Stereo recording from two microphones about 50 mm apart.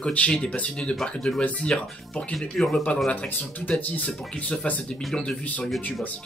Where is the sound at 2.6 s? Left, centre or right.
Centre.